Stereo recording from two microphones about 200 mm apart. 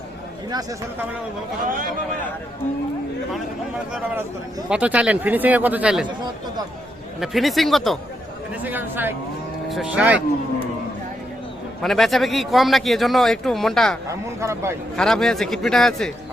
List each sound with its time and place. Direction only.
0.5 s speech: 15° right (ahead or behind)
4.7 s speech: 5° right (ahead or behind)
7.2 s a man's voice: centre (ahead or behind)
8.6 s a man's voice: 10° right (ahead or behind)
11.8 s a man's voice: centre (ahead or behind)
14.1 s speech: 15° right (ahead or behind)
14.9 s a man's voice: centre (ahead or behind)